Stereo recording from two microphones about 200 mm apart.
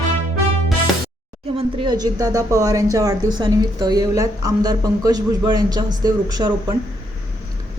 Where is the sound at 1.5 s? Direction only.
25° right (ahead or behind).